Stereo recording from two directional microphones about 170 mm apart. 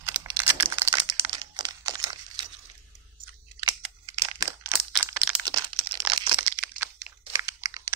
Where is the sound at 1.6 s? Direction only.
25° right (ahead or behind).